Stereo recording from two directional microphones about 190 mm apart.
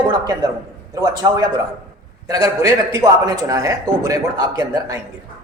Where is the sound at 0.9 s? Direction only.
20° right (ahead or behind).